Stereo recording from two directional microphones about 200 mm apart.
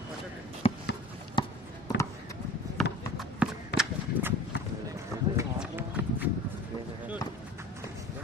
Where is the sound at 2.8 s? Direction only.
Centre (ahead or behind).